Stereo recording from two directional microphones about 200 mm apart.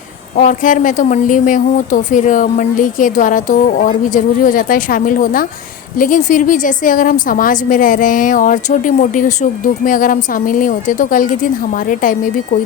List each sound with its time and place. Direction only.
0.3 s a woman's voice: 40° left (ahead or behind)